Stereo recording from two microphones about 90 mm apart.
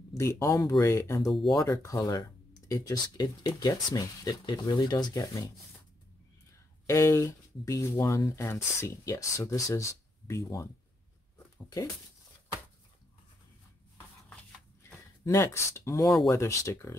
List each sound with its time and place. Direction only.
0.2 s speech: 35° left (ahead or behind)
1.2 s speech: centre (ahead or behind)
1.5 s speech: 35° left (ahead or behind)
2.0 s speech: 45° left (ahead or behind)
6.9 s speech: 35° left (ahead or behind)
15.2 s speech: 35° left (ahead or behind)